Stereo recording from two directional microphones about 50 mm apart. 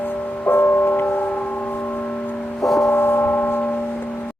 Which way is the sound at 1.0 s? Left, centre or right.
Left.